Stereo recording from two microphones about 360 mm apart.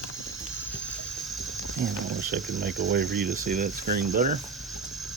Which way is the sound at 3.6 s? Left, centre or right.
Right.